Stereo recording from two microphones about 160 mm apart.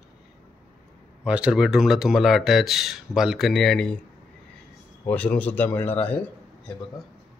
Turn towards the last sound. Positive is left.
turn(degrees=10)  # may be behind; listen again after turning